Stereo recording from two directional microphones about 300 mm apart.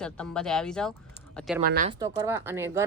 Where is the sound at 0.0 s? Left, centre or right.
Centre.